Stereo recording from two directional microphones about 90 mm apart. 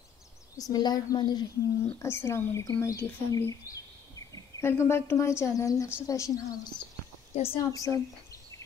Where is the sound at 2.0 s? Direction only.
30° left (ahead or behind).